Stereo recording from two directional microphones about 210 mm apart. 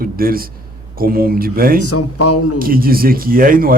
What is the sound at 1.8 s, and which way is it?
Speech, 90° left.